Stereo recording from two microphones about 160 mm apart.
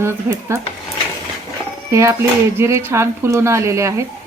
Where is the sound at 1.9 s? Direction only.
20° right (ahead or behind).